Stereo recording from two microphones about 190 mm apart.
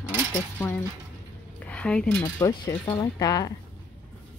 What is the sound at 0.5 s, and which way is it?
Speech, 10° left (ahead or behind).